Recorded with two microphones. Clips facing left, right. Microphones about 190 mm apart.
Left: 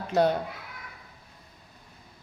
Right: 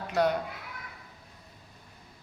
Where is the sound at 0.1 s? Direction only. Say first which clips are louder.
Left 3 dB; 30° left (ahead or behind).